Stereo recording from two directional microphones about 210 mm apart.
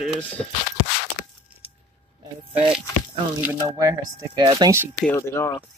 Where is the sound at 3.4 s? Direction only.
15° right (ahead or behind).